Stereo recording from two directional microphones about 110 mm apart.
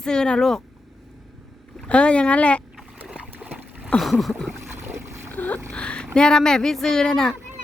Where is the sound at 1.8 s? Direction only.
10° left (ahead or behind).